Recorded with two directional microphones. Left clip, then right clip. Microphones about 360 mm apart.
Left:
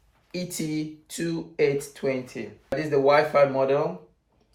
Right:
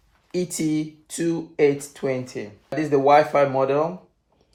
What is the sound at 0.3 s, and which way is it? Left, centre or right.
Speech, centre.